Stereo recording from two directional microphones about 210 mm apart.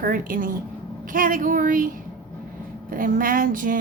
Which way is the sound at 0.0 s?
40° right (ahead or behind).